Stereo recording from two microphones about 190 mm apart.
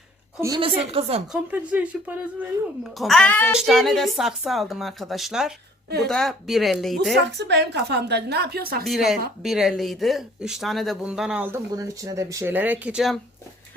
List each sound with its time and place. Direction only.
0.4 s a woman's voice: 25° right (ahead or behind)
1.3 s speech: 10° right (ahead or behind)
3.0 s a child's voice: centre (ahead or behind)
3.7 s speech: centre (ahead or behind)
7.3 s a woman's voice: 65° right (ahead or behind)
8.8 s speech: centre (ahead or behind)